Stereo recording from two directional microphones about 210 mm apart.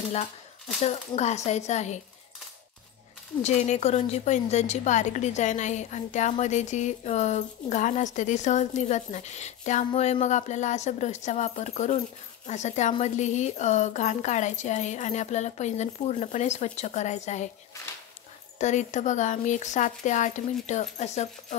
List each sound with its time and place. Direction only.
0.8 s a woman's voice: 30° left (ahead or behind)
3.4 s a woman's voice: 35° left (ahead or behind)
18.6 s a woman's voice: 35° left (ahead or behind)